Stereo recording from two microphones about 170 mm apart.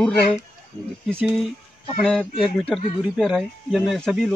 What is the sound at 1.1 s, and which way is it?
Speech, 10° right (ahead or behind).